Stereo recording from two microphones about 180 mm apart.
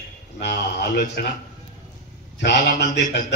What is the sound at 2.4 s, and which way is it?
Speech, 70° left (ahead or behind).